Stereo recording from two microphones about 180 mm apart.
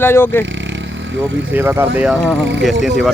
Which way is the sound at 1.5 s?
10° right (ahead or behind).